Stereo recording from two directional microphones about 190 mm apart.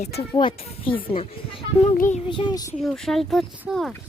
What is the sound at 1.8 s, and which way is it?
Child singing, 40° left (ahead or behind).